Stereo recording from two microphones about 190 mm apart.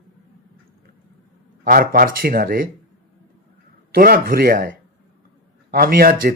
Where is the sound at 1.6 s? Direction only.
50° right (ahead or behind).